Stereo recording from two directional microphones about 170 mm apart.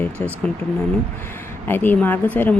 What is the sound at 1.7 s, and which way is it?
Speech, 10° left (ahead or behind).